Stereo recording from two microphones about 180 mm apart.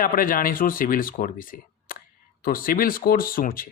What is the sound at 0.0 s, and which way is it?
Speech, 50° left (ahead or behind).